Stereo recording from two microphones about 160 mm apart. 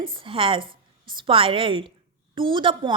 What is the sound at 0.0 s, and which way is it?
A woman's voice, 30° right (ahead or behind).